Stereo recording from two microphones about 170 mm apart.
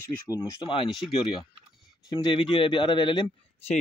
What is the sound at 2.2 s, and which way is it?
Speech, 30° left (ahead or behind).